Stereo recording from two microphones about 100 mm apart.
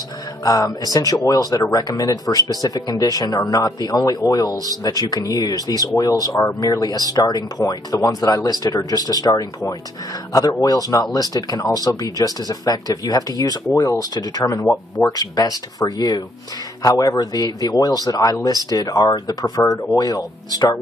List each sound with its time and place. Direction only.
0.4 s speech: 35° left (ahead or behind)